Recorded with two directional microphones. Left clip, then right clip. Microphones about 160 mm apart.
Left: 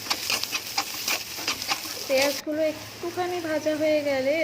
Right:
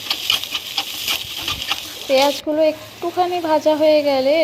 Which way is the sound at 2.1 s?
30° right (ahead or behind).